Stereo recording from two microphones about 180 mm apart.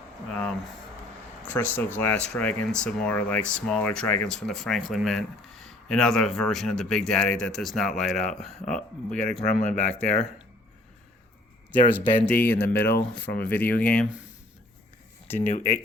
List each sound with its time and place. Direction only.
0.3 s a man's voice: 5° left (ahead or behind)
9.5 s speech: 45° left (ahead or behind)
11.7 s speech: 10° left (ahead or behind)
15.4 s speech: 45° left (ahead or behind)